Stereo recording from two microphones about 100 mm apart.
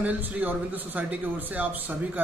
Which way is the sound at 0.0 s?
15° right (ahead or behind).